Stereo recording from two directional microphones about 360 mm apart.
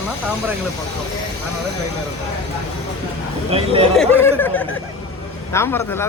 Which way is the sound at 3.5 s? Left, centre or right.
Centre.